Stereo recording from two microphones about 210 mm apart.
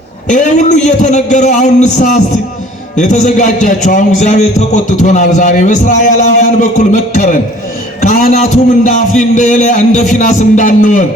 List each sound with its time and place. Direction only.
0.3 s a man's voice: 35° left (ahead or behind)